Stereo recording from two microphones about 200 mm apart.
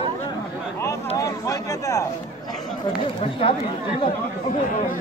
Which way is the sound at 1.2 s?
15° left (ahead or behind).